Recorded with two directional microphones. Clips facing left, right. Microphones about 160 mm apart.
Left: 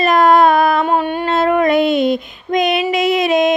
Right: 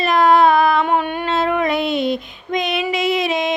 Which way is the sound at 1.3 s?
45° left (ahead or behind).